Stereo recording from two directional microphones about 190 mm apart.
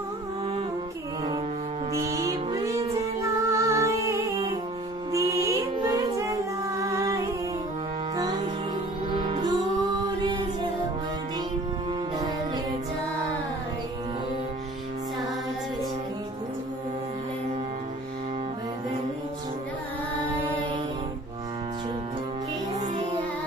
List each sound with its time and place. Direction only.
1.9 s music: 15° right (ahead or behind)
5.1 s music: 15° right (ahead or behind)
9.1 s music: 25° right (ahead or behind)